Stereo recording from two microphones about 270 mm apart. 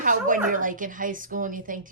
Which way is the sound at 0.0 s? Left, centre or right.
Right.